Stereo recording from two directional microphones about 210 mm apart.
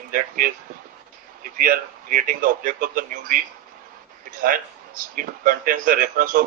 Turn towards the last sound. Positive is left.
turn(degrees=-40)  # may be behind; listen again after turning